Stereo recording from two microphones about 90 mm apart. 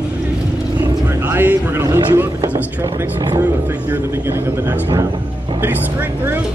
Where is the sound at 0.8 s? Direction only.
25° right (ahead or behind).